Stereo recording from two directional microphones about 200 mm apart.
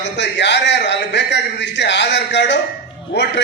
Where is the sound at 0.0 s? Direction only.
60° left (ahead or behind).